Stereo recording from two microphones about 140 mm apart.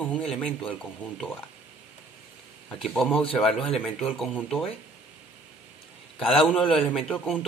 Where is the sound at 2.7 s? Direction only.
Centre (ahead or behind).